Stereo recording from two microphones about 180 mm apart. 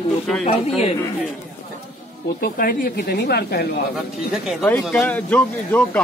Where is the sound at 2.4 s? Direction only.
55° left (ahead or behind).